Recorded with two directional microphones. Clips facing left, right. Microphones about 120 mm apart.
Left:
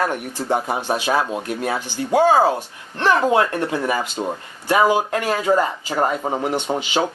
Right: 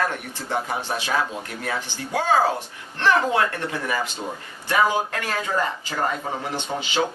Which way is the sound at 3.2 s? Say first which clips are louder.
Left 5 dB; 20° left (ahead or behind).